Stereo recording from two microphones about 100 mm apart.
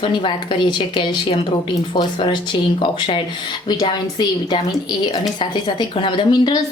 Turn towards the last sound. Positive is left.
turn(degrees=50)  # may be behind; listen again after turning